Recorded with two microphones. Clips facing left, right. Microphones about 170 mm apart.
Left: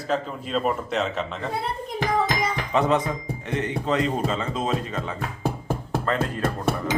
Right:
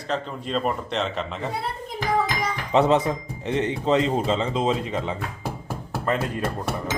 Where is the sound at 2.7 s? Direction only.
30° right (ahead or behind).